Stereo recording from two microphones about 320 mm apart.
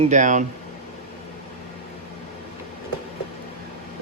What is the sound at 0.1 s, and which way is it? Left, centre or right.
Speech, right.